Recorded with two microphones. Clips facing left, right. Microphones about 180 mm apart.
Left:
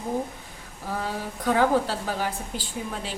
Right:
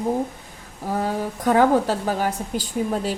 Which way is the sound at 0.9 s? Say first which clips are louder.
Right 6 dB; 45° right (ahead or behind).